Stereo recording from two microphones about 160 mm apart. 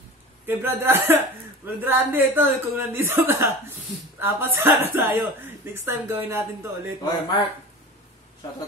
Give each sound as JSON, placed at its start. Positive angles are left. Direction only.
{"t": 0.5, "sound": "speech", "side_deg": -15}
{"t": 7.0, "sound": "speech", "side_deg": 25}